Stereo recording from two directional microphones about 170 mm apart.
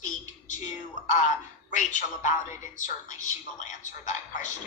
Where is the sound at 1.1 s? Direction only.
45° left (ahead or behind).